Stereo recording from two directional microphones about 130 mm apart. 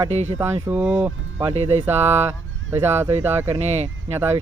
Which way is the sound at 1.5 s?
55° right (ahead or behind).